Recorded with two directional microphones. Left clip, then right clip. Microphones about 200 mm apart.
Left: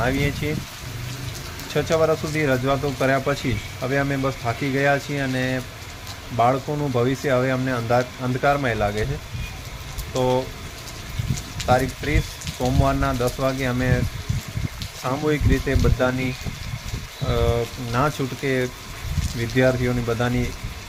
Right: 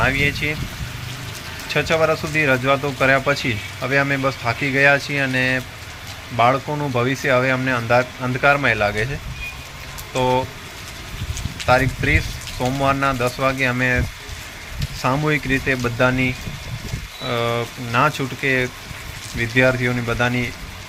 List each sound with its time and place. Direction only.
0.0 s speech: 5° left (ahead or behind)
1.7 s speech: 5° left (ahead or behind)
10.2 s speech: 5° left (ahead or behind)
11.6 s speech: 5° left (ahead or behind)
15.0 s speech: centre (ahead or behind)
17.2 s speech: 5° left (ahead or behind)